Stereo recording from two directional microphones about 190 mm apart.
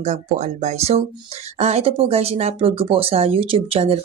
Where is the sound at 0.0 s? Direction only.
40° right (ahead or behind).